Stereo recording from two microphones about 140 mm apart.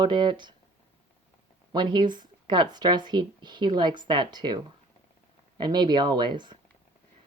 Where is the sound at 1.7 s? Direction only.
30° right (ahead or behind).